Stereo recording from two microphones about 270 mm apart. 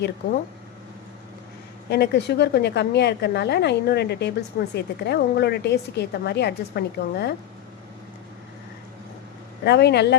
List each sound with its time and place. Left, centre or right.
1.9 s a woman's voice: left
9.6 s a woman's voice: left